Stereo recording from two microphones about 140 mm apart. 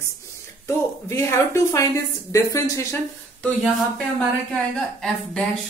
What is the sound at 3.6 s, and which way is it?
Speech, centre (ahead or behind).